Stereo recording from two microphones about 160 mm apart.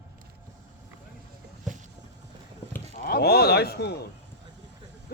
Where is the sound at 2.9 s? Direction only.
70° left (ahead or behind); by 4.0 s 90° left.